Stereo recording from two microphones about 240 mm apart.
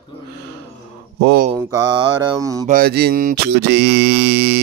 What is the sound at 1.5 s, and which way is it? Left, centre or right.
Mantra, centre.